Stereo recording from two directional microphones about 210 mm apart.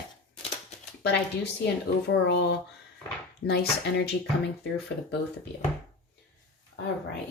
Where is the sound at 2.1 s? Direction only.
55° left (ahead or behind).